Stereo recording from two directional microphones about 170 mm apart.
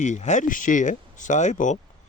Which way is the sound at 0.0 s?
45° left (ahead or behind).